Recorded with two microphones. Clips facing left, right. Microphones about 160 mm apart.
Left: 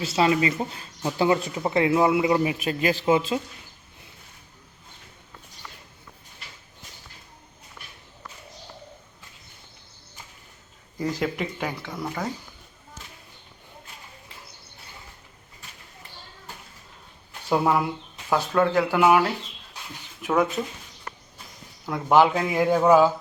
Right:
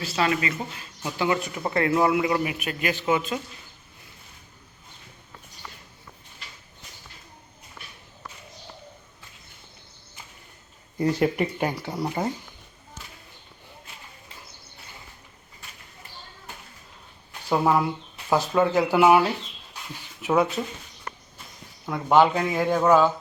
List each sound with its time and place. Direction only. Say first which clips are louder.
0.0 s speech: left 4 dB; 25° left (ahead or behind)
10.9 s speech: right 4 dB; 30° right (ahead or behind)
17.5 s speech: even; 5° left (ahead or behind)
18.3 s speech: even; 10° right (ahead or behind)
21.8 s speech: even; 5° left (ahead or behind)